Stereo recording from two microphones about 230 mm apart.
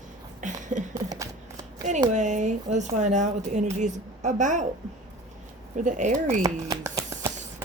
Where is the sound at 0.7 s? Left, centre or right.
Right.